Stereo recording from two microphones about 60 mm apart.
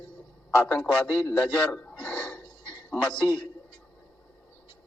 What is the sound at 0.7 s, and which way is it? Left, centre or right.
Speech, left.